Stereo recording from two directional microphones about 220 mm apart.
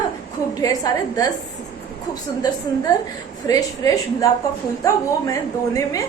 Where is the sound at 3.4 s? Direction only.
15° left (ahead or behind).